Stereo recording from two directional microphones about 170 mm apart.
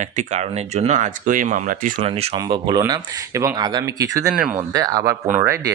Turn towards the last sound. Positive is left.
turn(degrees=-15)  # may be behind; listen again after turning